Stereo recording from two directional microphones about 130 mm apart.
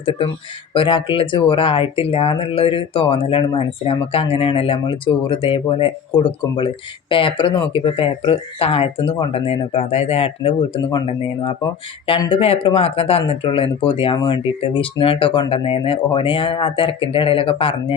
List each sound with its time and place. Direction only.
0.0 s speech: 45° left (ahead or behind)
12.0 s speech: 45° left (ahead or behind)